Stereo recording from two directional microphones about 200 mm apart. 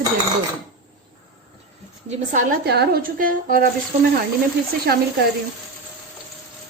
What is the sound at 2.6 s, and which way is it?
A woman's voice, 55° right (ahead or behind).